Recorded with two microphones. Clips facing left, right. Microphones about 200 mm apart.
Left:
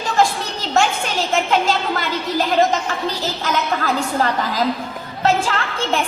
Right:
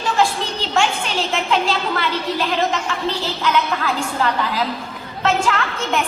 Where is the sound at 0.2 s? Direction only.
45° left (ahead or behind).